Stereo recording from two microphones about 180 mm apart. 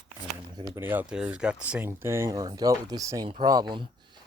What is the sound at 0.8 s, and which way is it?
Speech, 10° right (ahead or behind).